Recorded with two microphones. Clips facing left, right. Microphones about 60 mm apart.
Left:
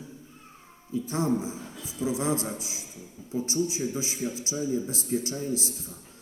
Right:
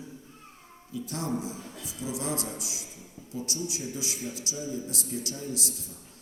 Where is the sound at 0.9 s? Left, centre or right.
Left.